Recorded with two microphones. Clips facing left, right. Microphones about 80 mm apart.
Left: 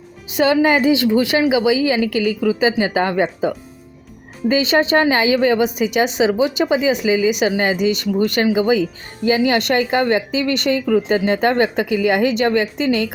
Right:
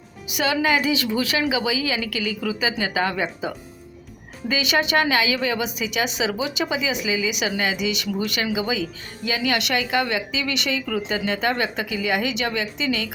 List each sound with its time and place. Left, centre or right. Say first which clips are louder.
0.3 s a woman's voice: left 7 dB; left